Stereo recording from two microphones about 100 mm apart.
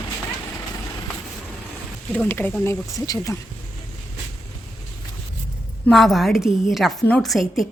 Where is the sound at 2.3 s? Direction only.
20° left (ahead or behind).